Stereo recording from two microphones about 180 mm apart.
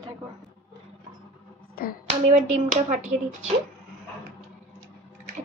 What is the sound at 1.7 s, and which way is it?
Speech, 55° left (ahead or behind).